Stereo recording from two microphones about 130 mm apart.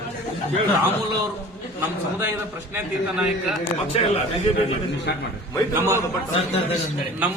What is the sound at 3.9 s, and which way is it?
Speech, 50° left (ahead or behind).